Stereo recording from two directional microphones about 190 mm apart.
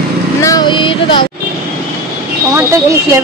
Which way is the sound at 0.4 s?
20° left (ahead or behind).